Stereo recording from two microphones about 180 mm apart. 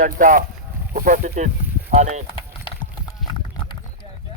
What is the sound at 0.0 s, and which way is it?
Speech, 45° right (ahead or behind).